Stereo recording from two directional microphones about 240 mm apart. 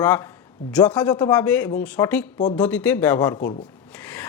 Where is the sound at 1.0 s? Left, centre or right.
Centre.